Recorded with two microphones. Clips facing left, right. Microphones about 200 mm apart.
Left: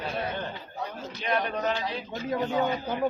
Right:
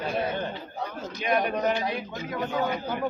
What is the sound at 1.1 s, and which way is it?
A man's voice, 15° right (ahead or behind).